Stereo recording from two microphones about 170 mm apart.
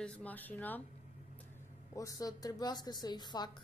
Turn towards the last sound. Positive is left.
turn(degrees=25)  # may be behind; listen again after turning